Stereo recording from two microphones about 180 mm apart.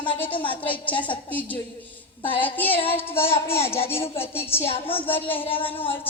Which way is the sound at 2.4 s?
10° left (ahead or behind).